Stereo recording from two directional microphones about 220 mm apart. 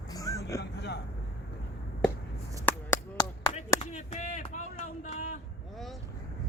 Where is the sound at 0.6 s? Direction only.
50° left (ahead or behind).